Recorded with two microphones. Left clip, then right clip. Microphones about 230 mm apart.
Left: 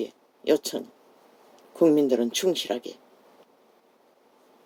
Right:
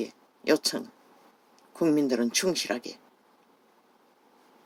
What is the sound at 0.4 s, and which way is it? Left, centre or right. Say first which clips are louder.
Speech: left 1 dB; right.